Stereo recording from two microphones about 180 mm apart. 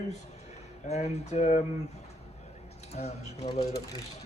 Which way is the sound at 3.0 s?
35° left (ahead or behind).